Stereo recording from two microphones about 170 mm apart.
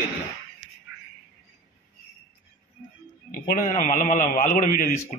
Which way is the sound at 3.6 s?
50° left (ahead or behind).